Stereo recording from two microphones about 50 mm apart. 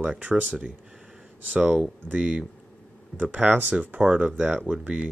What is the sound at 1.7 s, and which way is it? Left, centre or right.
Speech, right.